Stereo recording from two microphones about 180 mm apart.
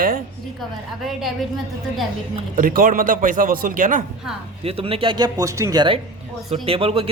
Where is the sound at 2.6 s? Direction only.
50° right (ahead or behind).